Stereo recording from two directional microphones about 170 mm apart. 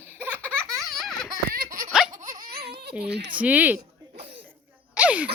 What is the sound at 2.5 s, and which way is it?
Baby cry, 70° right (ahead or behind).